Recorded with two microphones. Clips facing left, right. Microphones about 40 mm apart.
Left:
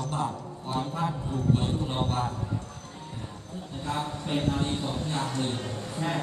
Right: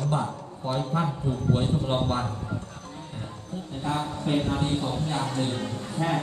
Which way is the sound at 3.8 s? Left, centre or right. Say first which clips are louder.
Right 3 dB; centre.